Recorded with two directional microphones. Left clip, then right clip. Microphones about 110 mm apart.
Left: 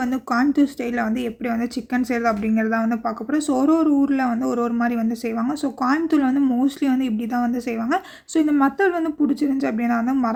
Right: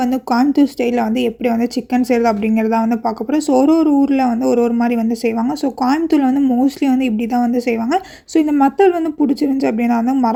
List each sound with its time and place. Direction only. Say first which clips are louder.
0.0 s a woman's voice: right 5 dB; 40° right (ahead or behind)